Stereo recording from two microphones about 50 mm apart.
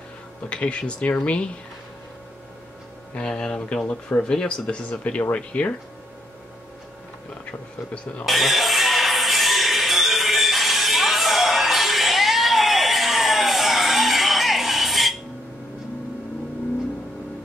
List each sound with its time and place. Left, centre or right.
0.5 s speech: left
3.2 s speech: centre
8.3 s music: centre